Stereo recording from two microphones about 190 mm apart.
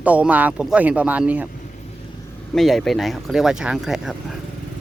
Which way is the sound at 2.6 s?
Centre (ahead or behind).